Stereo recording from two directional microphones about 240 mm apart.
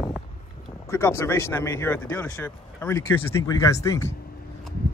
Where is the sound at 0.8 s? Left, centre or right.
Centre.